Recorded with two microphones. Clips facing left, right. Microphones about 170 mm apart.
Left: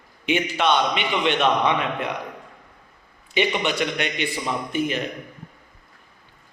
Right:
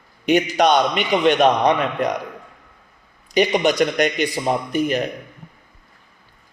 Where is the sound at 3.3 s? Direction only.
40° right (ahead or behind).